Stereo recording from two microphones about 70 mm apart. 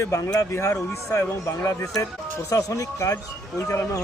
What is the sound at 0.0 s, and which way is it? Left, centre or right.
Speech, left.